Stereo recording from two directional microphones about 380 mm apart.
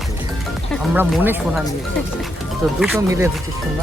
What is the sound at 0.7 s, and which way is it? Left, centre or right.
Speech, centre.